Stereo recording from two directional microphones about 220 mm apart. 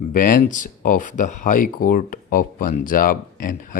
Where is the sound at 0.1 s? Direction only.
40° left (ahead or behind).